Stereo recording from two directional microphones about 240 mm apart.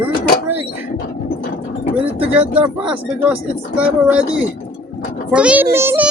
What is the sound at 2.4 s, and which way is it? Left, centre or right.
A child's voice, centre.